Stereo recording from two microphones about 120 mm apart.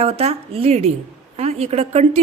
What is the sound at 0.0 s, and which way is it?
A woman's voice, 60° right (ahead or behind).